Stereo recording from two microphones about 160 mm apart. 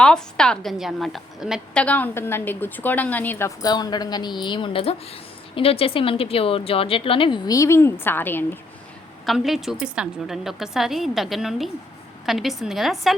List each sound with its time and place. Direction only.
0.0 s a woman's voice: 5° left (ahead or behind)
1.8 s a woman's voice: 10° left (ahead or behind)
9.2 s a woman's voice: centre (ahead or behind)